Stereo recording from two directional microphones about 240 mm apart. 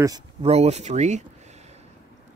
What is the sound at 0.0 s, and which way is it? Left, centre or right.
Speech, centre.